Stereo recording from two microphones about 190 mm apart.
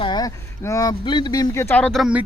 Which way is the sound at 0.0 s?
20° left (ahead or behind).